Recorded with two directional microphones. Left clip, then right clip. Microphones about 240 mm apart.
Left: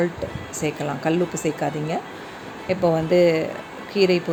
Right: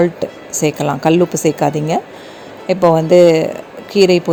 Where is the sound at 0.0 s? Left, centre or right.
Right.